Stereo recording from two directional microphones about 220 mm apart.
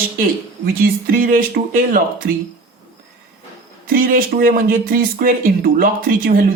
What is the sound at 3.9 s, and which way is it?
Speech, 40° right (ahead or behind).